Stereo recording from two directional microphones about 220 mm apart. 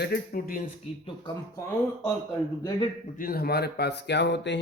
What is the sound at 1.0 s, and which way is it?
Speech, 20° left (ahead or behind).